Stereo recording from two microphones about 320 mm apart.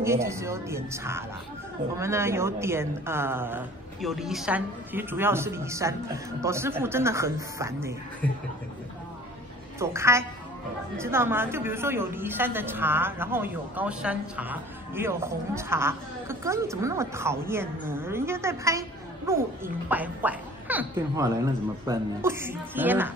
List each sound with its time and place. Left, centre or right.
0.0 s a woman's voice: centre
9.8 s a woman's voice: centre